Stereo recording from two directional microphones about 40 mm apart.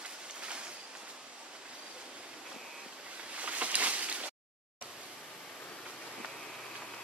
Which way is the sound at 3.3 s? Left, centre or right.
Right.